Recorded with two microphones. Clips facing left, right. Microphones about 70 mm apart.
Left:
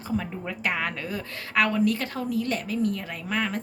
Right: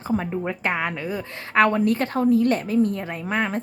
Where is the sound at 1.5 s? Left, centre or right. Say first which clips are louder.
Right 5 dB; right.